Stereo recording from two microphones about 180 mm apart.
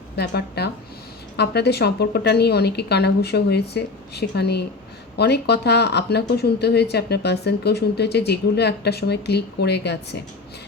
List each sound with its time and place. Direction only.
0.2 s speech: 65° left (ahead or behind)